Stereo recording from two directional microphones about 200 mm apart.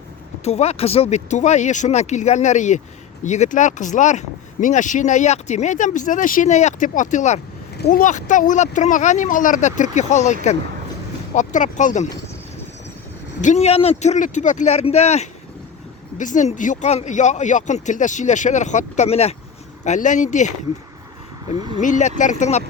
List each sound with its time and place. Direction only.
0.4 s speech: 30° left (ahead or behind)
11.3 s speech: 40° left (ahead or behind)
13.4 s speech: 35° left (ahead or behind)
21.5 s speech: 20° right (ahead or behind)
21.8 s speech: 40° left (ahead or behind)